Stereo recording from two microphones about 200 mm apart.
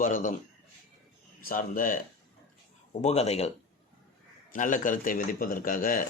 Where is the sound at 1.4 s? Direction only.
45° left (ahead or behind).